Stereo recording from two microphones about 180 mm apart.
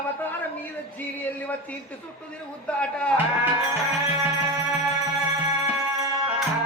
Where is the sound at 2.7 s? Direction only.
5° left (ahead or behind).